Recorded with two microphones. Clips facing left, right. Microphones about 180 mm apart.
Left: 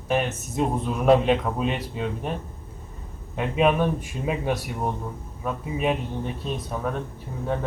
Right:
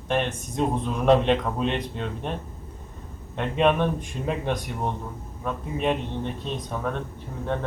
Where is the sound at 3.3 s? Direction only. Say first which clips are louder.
Even; 5° left (ahead or behind).